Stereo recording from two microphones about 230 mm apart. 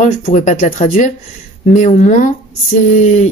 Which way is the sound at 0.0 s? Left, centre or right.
Left.